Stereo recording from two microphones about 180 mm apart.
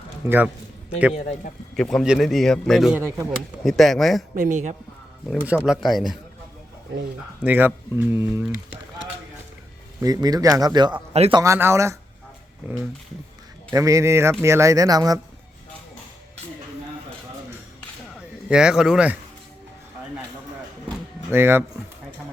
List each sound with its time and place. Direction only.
0.3 s speech: 10° right (ahead or behind)
1.7 s a man's voice: centre (ahead or behind)
3.0 s speech: 15° right (ahead or behind)
3.6 s a man's voice: centre (ahead or behind)
4.4 s a woman's voice: 40° right (ahead or behind)
5.4 s a man's voice: 10° right (ahead or behind)
7.4 s speech: 10° right (ahead or behind)
10.0 s speech: 20° right (ahead or behind)
11.1 s a woman's voice: 35° right (ahead or behind)
11.3 s speech: 15° right (ahead or behind)
18.4 s a man's voice: 5° right (ahead or behind)
21.2 s speech: 10° right (ahead or behind)